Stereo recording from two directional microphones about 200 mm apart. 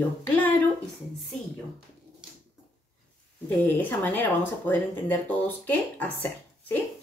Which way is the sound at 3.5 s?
10° left (ahead or behind).